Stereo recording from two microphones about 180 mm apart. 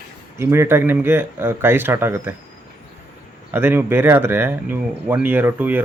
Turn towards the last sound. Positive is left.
turn(degrees=-10)  # may be behind; listen again after turning